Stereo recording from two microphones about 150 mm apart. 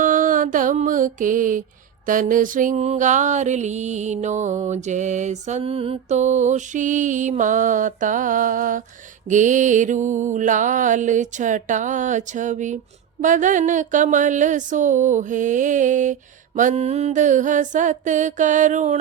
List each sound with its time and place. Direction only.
0.0 s mantra: 60° right (ahead or behind)